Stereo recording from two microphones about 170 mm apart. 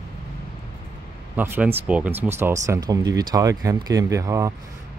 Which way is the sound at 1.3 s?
10° right (ahead or behind).